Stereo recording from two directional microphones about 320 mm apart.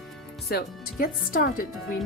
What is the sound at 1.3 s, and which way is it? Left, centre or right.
Speech, left.